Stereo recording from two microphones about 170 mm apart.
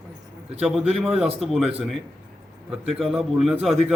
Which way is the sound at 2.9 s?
Centre (ahead or behind).